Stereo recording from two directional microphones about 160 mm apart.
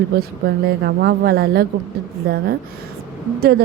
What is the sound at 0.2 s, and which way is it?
A woman's voice, 85° right.